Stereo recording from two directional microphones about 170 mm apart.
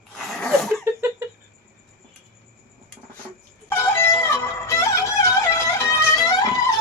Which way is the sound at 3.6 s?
15° left (ahead or behind).